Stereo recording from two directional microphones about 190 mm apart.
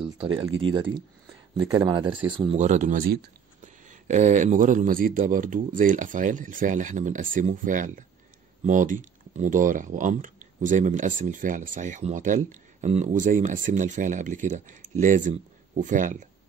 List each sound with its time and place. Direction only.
0.6 s speech: 25° right (ahead or behind)
2.0 s speech: 5° right (ahead or behind)
2.5 s speech: 40° right (ahead or behind)